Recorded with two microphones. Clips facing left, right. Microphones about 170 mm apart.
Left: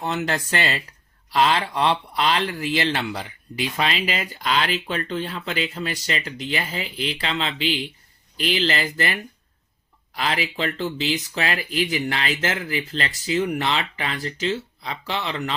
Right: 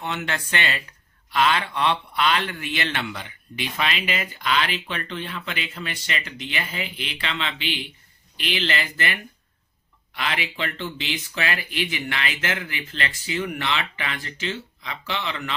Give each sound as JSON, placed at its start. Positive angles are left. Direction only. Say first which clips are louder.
{"t": 0.0, "sound": "speech", "louder": "left 4 dB", "side_deg": 35}